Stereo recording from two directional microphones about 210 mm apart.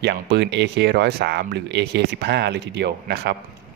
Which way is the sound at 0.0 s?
55° right (ahead or behind).